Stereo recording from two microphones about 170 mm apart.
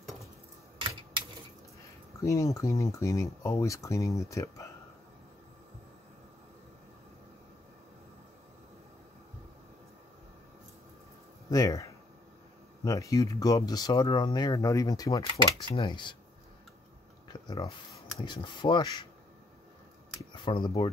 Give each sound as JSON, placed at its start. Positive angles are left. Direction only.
{"t": 0.0, "sound": "a sound", "side_deg": 0}
{"t": 0.7, "sound": "typewriter", "side_deg": -30}
{"t": 2.2, "sound": "speech", "side_deg": 20}
{"t": 11.5, "sound": "speech", "side_deg": 20}
{"t": 17.3, "sound": "speech", "side_deg": 25}
{"t": 20.4, "sound": "speech", "side_deg": 25}